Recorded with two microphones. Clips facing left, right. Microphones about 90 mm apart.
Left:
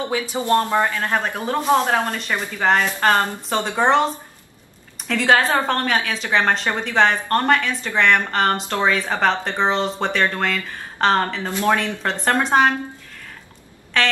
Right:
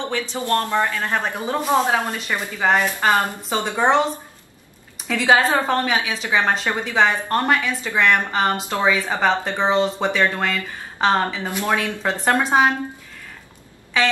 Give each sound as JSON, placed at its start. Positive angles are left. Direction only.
{"t": 0.3, "sound": "speech", "side_deg": 20}
{"t": 1.3, "sound": "a woman's voice", "side_deg": -5}
{"t": 5.0, "sound": "a woman's voice", "side_deg": -5}
{"t": 14.0, "sound": "a woman's voice", "side_deg": -5}